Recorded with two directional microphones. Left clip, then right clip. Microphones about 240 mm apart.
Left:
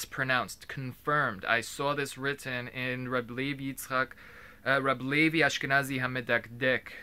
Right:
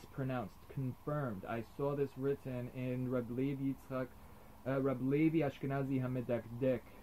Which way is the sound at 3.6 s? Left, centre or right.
Left.